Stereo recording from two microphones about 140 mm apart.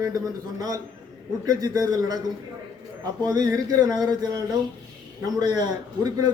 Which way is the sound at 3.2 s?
25° right (ahead or behind).